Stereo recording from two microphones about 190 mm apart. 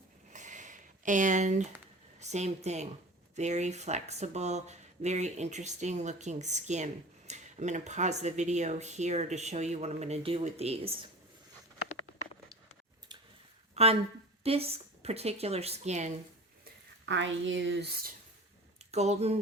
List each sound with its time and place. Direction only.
0.3 s a sound: 40° right (ahead or behind)
2.1 s a woman's voice: 35° right (ahead or behind)
13.8 s speech: 35° right (ahead or behind)
17.1 s speech: 75° right (ahead or behind)
18.9 s speech: 35° right (ahead or behind)